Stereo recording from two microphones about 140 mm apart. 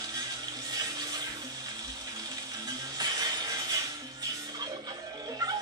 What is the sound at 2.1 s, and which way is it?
Music, 30° right (ahead or behind).